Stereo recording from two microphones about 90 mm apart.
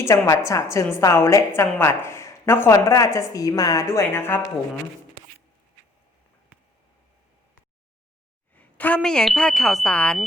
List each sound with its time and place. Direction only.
0.0 s a woman's voice: 35° left (ahead or behind)
8.5 s a sound: 15° left (ahead or behind)
9.0 s speech: 5° left (ahead or behind)
9.9 s speech: 10° left (ahead or behind)